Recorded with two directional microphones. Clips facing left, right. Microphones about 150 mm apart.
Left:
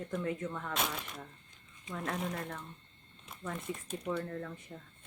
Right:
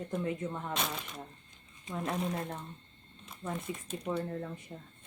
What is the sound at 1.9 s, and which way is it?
Speech, 20° right (ahead or behind).